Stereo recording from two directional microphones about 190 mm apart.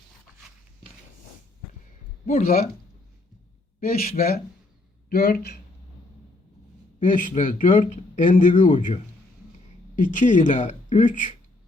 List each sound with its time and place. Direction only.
2.2 s a man's voice: 50° left (ahead or behind)
3.8 s speech: 50° left (ahead or behind)
7.0 s a man's voice: 45° left (ahead or behind)
8.6 s speech: 25° left (ahead or behind)
10.0 s a man's voice: 40° left (ahead or behind)